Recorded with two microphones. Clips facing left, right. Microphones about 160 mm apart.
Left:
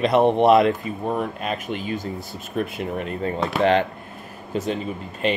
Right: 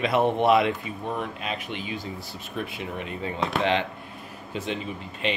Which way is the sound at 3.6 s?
45° left (ahead or behind).